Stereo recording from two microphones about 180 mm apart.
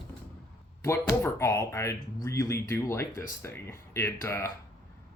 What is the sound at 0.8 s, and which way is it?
Speech, 15° left (ahead or behind).